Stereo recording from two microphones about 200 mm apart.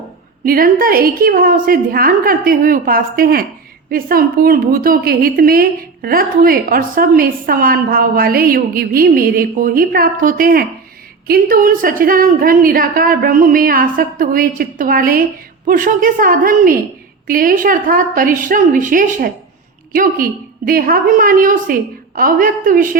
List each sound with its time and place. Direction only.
0.4 s a woman's voice: 45° right (ahead or behind)